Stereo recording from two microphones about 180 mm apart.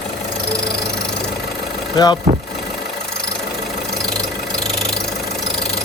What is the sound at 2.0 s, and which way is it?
Speech, 20° left (ahead or behind).